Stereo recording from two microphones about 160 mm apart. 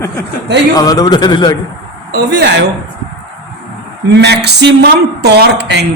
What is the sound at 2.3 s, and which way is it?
Speech, 90° right.